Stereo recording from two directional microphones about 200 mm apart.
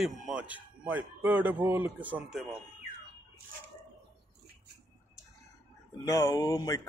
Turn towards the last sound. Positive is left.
turn(degrees=15)  # may be behind; listen again after turning